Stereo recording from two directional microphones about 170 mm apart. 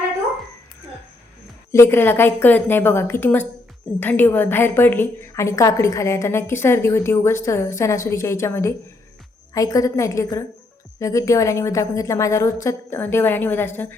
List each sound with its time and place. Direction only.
1.7 s a woman's voice: 15° left (ahead or behind)